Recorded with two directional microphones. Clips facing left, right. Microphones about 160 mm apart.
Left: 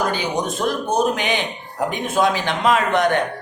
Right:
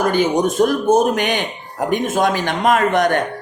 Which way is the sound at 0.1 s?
45° right (ahead or behind).